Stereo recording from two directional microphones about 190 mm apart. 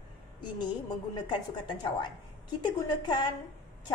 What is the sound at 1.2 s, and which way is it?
A woman's voice, 25° left (ahead or behind).